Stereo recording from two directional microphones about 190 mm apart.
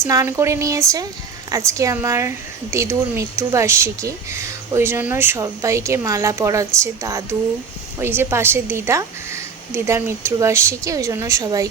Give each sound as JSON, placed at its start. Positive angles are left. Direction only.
{"t": 0.0, "sound": "speech", "side_deg": -15}